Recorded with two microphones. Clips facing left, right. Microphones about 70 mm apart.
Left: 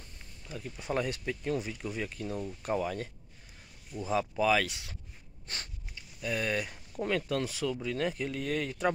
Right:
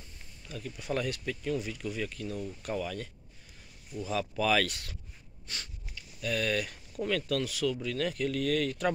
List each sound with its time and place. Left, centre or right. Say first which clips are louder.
0.5 s speech: even; left; by 4.9 s centre
5.5 s a sound: left 1 dB; left
5.9 s speech: right 1 dB; left